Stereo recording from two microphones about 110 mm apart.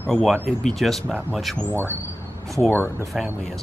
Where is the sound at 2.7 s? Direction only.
15° left (ahead or behind).